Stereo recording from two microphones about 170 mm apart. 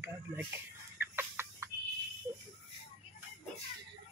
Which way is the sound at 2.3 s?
20° right (ahead or behind).